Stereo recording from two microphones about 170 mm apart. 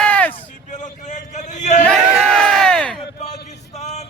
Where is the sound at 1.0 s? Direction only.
45° left (ahead or behind).